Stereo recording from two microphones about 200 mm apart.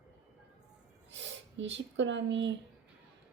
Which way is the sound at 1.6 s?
65° right (ahead or behind).